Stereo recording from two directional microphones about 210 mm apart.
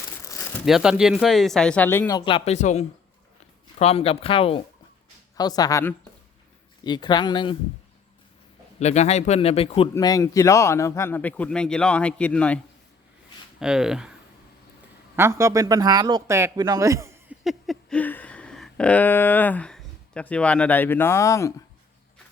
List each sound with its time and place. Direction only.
0.6 s speech: 5° right (ahead or behind); by 7.5 s 20° left (ahead or behind)
8.8 s speech: 30° left (ahead or behind)
9.9 s speech: 15° left (ahead or behind)
13.6 s a man's voice: 5° right (ahead or behind)
17.4 s a sound: centre (ahead or behind)